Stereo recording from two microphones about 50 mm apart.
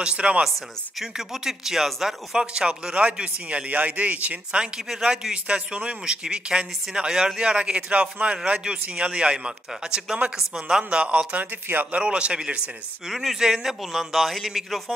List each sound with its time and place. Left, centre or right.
0.0 s speech: right
0.9 s speech: centre
10.9 s speech: right
11.6 s speech: right
11.9 s speech: right
13.1 s a man's voice: centre